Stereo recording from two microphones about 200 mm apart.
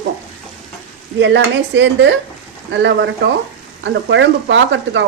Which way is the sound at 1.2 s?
65° right (ahead or behind).